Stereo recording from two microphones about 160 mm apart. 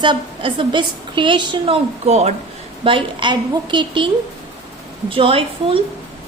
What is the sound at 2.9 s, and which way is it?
A woman's voice, 30° right (ahead or behind).